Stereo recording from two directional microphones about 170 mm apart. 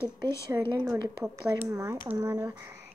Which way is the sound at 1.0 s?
25° right (ahead or behind).